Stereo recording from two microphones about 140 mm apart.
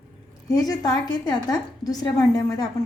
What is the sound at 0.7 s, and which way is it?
A woman's voice, 30° left (ahead or behind).